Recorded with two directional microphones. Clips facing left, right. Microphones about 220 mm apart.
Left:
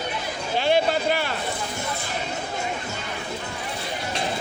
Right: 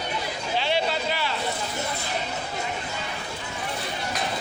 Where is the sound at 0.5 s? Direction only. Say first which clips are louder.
Left 5 dB; 50° left (ahead or behind).